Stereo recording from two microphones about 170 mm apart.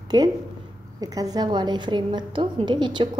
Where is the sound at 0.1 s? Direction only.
25° right (ahead or behind).